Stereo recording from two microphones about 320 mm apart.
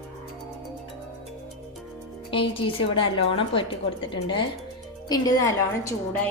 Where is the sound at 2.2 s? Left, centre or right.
Centre.